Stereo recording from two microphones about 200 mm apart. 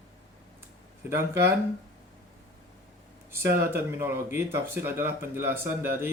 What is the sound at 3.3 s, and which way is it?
Speech, 10° right (ahead or behind).